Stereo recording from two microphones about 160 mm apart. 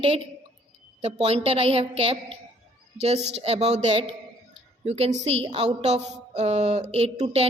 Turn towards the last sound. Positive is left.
turn(degrees=-40)  # may be behind; listen again after turning